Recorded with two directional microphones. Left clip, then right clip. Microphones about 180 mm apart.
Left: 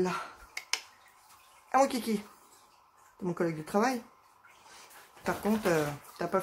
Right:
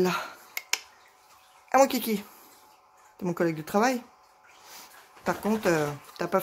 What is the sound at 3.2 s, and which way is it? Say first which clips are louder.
Speech: right 5 dB; 30° right (ahead or behind).